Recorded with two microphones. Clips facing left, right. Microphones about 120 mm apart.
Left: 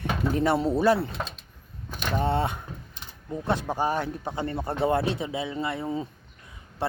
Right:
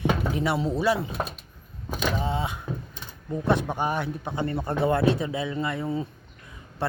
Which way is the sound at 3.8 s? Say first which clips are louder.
Left 1 dB; 35° left (ahead or behind).